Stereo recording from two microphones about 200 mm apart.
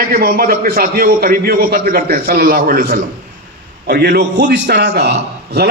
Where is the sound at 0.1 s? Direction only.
50° right (ahead or behind).